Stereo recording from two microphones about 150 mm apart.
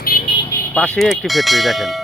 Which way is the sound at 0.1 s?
70° left (ahead or behind).